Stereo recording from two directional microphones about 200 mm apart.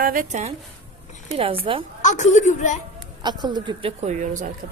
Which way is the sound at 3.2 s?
20° right (ahead or behind).